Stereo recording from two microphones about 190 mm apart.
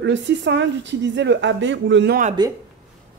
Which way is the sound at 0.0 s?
70° right (ahead or behind).